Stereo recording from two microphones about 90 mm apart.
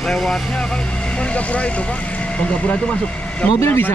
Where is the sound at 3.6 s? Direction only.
25° left (ahead or behind).